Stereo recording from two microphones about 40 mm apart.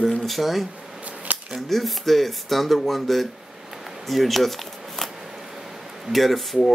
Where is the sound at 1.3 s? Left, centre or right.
Right.